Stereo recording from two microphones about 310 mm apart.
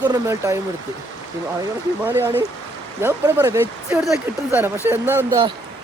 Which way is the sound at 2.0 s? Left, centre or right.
Centre.